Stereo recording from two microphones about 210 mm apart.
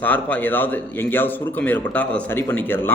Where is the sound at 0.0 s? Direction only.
10° left (ahead or behind).